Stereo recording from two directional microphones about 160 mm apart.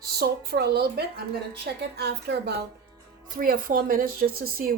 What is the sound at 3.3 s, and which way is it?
Speech, 60° right (ahead or behind).